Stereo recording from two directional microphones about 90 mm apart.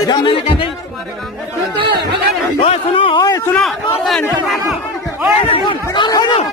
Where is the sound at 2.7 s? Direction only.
75° left (ahead or behind).